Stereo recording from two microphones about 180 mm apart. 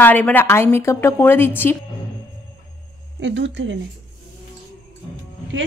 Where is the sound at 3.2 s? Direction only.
85° right.